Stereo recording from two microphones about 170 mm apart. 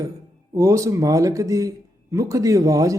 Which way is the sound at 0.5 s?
20° right (ahead or behind).